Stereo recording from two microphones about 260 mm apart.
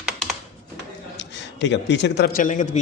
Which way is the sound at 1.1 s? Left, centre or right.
Left.